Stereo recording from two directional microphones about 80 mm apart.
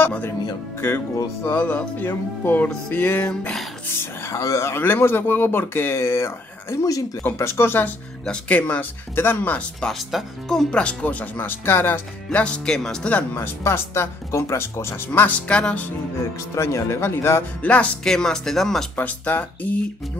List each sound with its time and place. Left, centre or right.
0.0 s music: left
0.7 s speech: left
4.4 s speech: left
4.7 s speech: left
7.2 s speech: left
8.3 s speech: centre
9.8 s speech: centre
10.7 s speech: centre
13.3 s speech: left
15.2 s speech: centre
16.5 s speech: left
17.6 s speech: centre
18.0 s speech: centre
18.9 s speech: left